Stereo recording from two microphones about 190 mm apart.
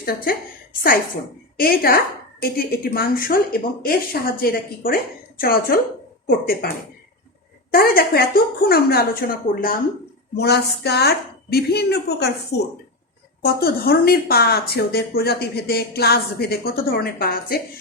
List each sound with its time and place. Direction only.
0.0 s a woman's voice: 50° left (ahead or behind)
1.5 s a woman's voice: 50° left (ahead or behind)
7.7 s a woman's voice: 50° left (ahead or behind)
10.3 s speech: 60° left (ahead or behind)